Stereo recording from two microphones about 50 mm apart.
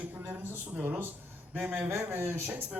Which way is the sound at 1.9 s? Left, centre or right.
Right.